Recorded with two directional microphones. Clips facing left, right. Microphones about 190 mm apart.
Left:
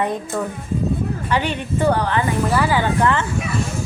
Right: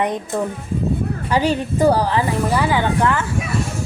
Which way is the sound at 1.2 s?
35° right (ahead or behind).